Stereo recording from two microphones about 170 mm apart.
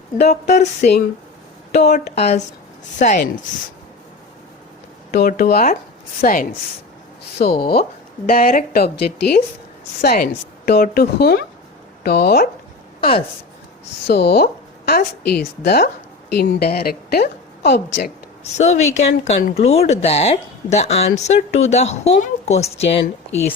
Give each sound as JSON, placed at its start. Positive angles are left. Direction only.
{"t": 0.2, "sound": "a woman's voice", "side_deg": 40}
{"t": 5.1, "sound": "a woman's voice", "side_deg": 65}
{"t": 14.1, "sound": "a woman's voice", "side_deg": 75}
{"t": 18.5, "sound": "speech", "side_deg": 40}